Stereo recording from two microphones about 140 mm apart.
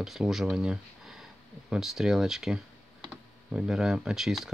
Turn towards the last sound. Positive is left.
turn(degrees=-5)  # may be behind; listen again after turning